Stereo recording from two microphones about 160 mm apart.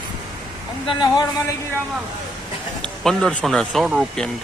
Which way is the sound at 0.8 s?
30° left (ahead or behind).